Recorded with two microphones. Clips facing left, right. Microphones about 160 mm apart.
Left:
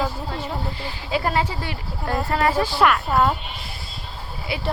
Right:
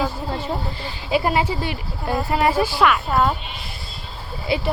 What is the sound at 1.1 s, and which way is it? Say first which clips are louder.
A woman's voice: right 3 dB; 15° right (ahead or behind).